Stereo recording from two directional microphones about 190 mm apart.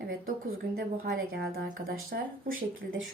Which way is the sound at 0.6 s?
55° right (ahead or behind).